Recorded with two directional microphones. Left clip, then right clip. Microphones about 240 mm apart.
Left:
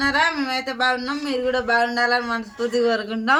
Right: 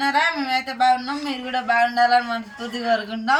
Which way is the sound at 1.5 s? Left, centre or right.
Left.